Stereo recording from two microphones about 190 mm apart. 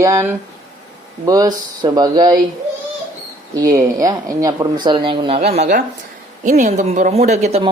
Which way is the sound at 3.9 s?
20° right (ahead or behind).